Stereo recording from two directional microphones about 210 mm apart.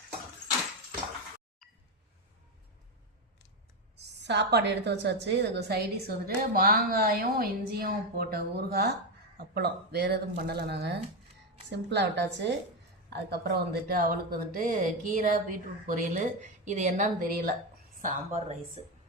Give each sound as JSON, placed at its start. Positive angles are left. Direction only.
{"t": 3.9, "sound": "a woman's voice", "side_deg": -55}